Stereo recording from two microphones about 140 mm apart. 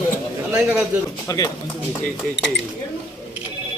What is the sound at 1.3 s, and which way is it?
Speech, 25° left (ahead or behind).